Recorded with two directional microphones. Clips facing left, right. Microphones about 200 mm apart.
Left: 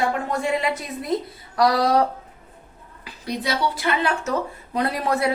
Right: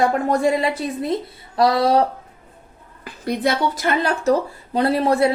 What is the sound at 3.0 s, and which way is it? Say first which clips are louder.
Speech: right 6 dB; 50° right (ahead or behind).